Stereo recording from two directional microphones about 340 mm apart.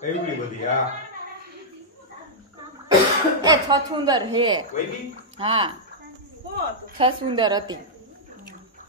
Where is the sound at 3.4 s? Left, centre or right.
Centre.